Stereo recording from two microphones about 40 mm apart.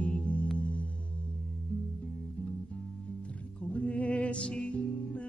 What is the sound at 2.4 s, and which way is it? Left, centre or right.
Music, left.